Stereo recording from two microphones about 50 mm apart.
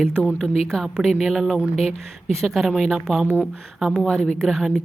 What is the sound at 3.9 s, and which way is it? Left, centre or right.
Speech, centre.